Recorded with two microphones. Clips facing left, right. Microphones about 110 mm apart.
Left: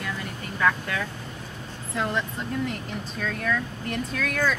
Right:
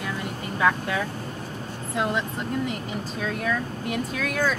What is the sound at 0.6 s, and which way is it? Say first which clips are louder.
Speech: right 2 dB; 15° right (ahead or behind).